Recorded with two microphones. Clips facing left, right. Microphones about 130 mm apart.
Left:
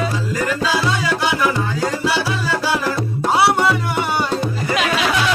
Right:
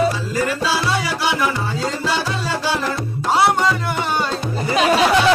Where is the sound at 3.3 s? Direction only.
10° left (ahead or behind).